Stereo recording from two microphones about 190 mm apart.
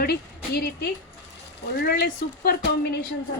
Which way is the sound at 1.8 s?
55° left (ahead or behind).